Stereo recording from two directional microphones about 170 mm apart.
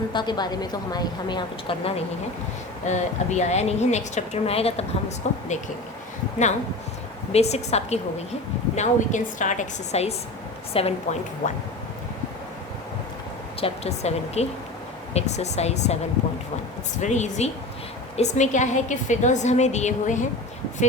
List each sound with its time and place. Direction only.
0.1 s a woman's voice: 25° left (ahead or behind)
2.8 s a woman's voice: 45° left (ahead or behind)
7.3 s a woman's voice: 40° left (ahead or behind)
13.6 s a woman's voice: 35° left (ahead or behind)
17.0 s a woman's voice: 45° left (ahead or behind)